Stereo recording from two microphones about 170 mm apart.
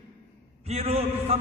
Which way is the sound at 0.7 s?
35° right (ahead or behind).